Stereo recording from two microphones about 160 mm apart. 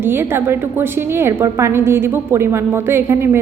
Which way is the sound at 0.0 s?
15° right (ahead or behind).